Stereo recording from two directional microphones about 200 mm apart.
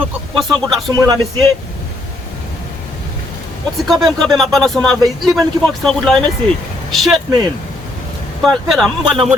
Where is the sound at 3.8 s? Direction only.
Centre (ahead or behind).